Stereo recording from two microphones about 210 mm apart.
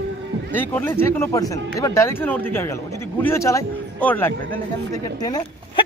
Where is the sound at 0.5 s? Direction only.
10° left (ahead or behind).